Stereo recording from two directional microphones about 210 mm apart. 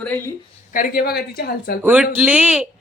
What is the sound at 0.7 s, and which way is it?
A woman's voice, 45° left (ahead or behind).